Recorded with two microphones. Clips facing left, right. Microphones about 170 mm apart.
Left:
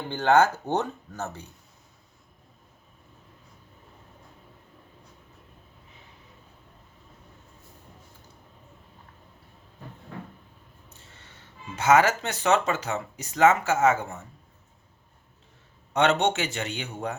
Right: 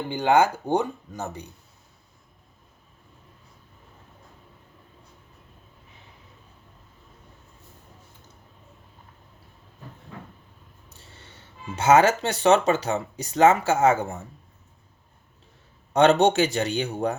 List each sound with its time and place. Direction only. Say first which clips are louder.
0.1 s speech: even; 15° right (ahead or behind)
11.8 s speech: right 3 dB; 30° right (ahead or behind)
15.9 s speech: right 5 dB; 35° right (ahead or behind)